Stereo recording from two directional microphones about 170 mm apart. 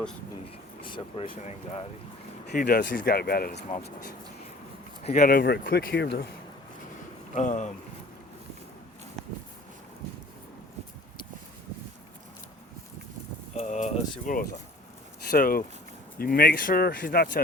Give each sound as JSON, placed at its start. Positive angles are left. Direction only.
{"t": 0.8, "sound": "speech", "side_deg": 30}
{"t": 2.5, "sound": "speech", "side_deg": 55}
{"t": 5.0, "sound": "speech", "side_deg": 50}
{"t": 7.3, "sound": "speech", "side_deg": 45}
{"t": 13.5, "sound": "a sound", "side_deg": 40}
{"t": 15.3, "sound": "speech", "side_deg": 55}